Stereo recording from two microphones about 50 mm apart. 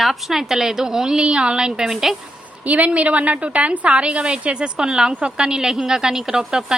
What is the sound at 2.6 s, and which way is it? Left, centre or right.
A woman's voice, right.